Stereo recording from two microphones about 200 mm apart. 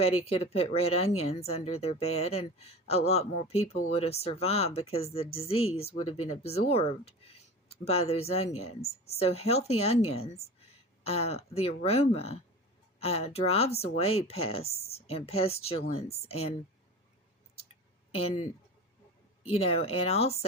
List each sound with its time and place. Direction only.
0.3 s speech: 30° left (ahead or behind)
18.2 s speech: 30° left (ahead or behind)
19.5 s speech: 30° left (ahead or behind)